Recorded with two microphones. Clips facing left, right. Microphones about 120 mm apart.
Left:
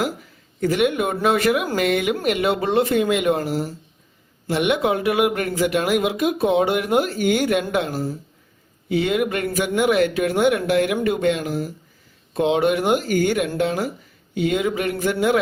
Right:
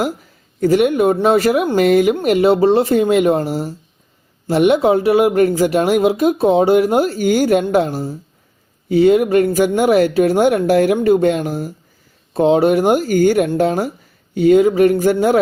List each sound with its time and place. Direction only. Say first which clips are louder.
0.6 s speech: right 7 dB; 40° right (ahead or behind)